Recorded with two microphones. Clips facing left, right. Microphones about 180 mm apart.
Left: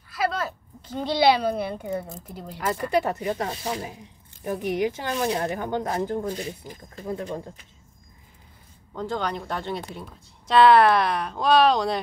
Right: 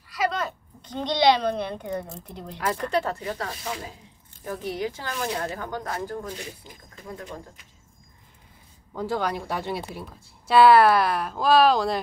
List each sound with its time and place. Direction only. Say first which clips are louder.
0.1 s speech: even; centre (ahead or behind)
3.0 s speech: left 3 dB; 20° left (ahead or behind)
7.0 s speech: left 7 dB; 30° left (ahead or behind)
8.9 s a woman's voice: right 1 dB; 5° right (ahead or behind)